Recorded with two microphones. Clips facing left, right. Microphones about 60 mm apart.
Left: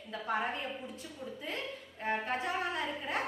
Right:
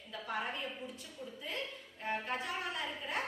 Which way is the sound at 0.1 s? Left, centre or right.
Left.